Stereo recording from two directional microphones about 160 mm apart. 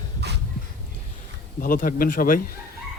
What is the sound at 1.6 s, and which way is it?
Speech, 60° left (ahead or behind).